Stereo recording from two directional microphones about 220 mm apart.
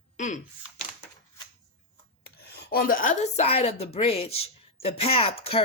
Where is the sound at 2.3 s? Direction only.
45° left (ahead or behind).